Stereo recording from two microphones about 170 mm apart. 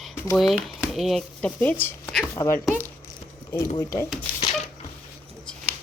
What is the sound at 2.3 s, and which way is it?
Speech, 15° left (ahead or behind).